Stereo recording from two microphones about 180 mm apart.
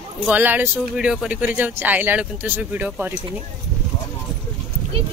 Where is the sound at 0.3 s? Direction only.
10° right (ahead or behind).